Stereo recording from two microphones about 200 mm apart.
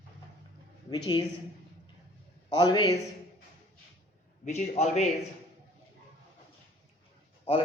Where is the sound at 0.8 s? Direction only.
20° left (ahead or behind).